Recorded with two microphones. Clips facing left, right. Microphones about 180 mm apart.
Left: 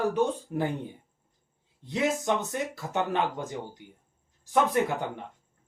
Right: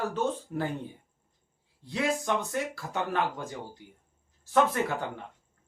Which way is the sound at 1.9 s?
20° left (ahead or behind).